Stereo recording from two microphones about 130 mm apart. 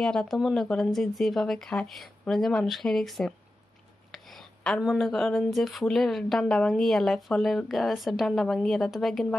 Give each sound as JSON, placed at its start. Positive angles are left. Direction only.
{"t": 0.0, "sound": "speech", "side_deg": 5}